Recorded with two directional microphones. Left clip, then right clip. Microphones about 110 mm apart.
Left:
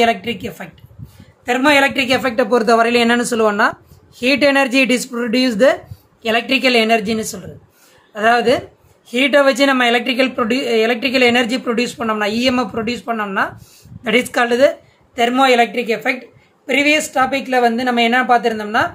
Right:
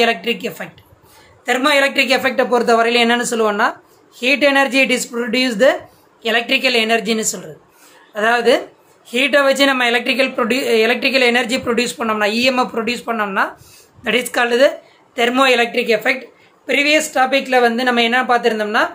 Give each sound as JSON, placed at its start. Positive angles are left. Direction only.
{"t": 0.0, "sound": "a woman's voice", "side_deg": 10}
{"t": 2.2, "sound": "a woman's voice", "side_deg": 35}
{"t": 15.1, "sound": "speech", "side_deg": 0}
{"t": 16.6, "sound": "a woman's voice", "side_deg": 15}